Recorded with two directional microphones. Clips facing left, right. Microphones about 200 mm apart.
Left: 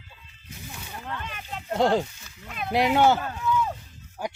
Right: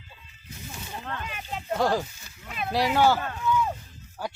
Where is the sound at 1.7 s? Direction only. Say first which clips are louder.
Left 3 dB; 20° left (ahead or behind).